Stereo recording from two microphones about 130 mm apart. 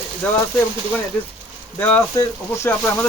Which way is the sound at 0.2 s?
10° left (ahead or behind).